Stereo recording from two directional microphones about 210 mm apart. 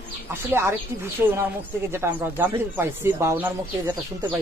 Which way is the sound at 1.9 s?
10° right (ahead or behind).